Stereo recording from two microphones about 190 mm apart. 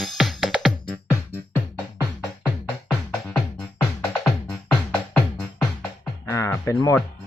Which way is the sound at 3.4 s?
5° left (ahead or behind).